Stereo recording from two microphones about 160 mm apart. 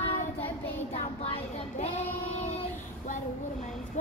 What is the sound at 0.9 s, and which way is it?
Speech, 40° left (ahead or behind).